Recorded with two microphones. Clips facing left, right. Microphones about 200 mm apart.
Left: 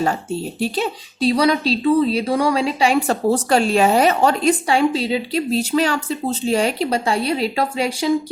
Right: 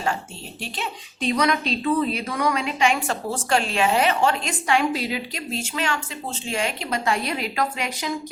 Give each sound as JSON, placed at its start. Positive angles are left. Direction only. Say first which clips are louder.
{"t": 0.6, "sound": "a woman's voice", "louder": "left 7 dB", "side_deg": 35}